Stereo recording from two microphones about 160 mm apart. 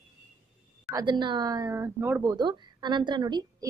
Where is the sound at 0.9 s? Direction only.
25° right (ahead or behind).